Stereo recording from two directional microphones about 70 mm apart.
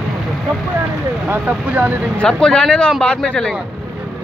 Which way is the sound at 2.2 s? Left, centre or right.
Centre.